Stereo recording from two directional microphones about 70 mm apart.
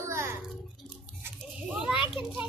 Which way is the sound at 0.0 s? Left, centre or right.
Right.